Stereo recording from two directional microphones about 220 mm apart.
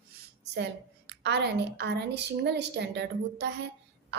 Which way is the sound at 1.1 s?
50° right (ahead or behind).